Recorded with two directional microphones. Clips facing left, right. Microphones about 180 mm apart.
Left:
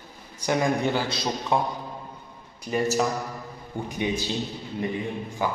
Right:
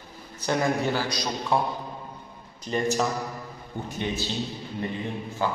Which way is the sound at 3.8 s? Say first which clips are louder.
Left 3 dB; 15° left (ahead or behind).